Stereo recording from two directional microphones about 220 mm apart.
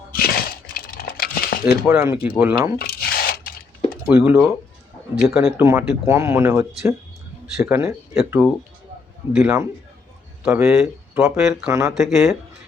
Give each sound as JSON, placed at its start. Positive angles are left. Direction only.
{"t": 0.1, "sound": "a sound", "side_deg": 45}
{"t": 1.9, "sound": "speech", "side_deg": -10}
{"t": 2.7, "sound": "squish", "side_deg": 45}
{"t": 4.0, "sound": "speech", "side_deg": -5}